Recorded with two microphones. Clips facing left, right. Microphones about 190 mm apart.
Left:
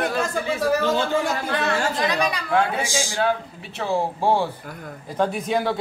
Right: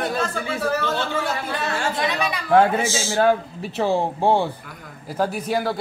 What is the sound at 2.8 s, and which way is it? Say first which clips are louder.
Speech: right 2 dB; 15° left (ahead or behind).